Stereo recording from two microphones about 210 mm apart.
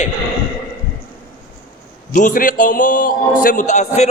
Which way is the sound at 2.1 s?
40° left (ahead or behind).